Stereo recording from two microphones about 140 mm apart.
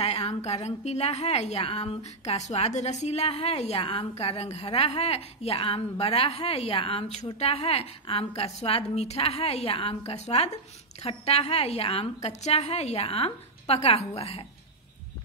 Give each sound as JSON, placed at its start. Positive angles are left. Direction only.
{"t": 0.0, "sound": "a woman's voice", "side_deg": 50}